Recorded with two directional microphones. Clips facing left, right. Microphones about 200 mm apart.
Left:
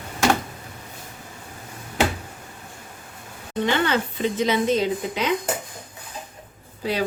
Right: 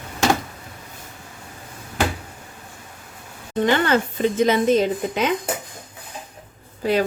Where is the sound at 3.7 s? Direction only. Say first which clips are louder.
Right 3 dB; 50° right (ahead or behind).